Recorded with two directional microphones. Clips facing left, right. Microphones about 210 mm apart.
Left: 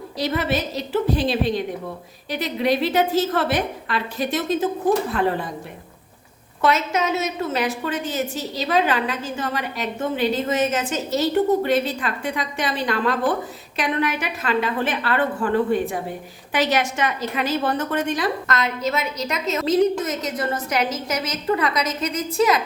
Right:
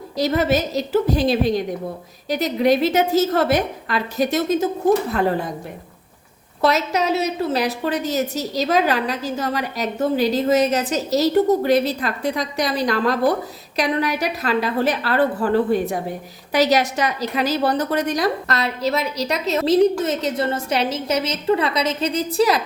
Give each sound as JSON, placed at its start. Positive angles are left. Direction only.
{"t": 0.2, "sound": "a woman's voice", "side_deg": -45}
{"t": 6.6, "sound": "a woman's voice", "side_deg": -35}